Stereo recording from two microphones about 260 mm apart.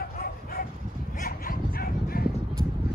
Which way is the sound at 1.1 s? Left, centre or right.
Left.